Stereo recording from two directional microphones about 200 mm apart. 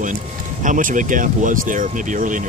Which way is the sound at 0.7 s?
40° right (ahead or behind).